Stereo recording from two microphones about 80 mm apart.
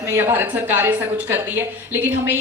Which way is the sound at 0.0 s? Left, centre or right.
Right.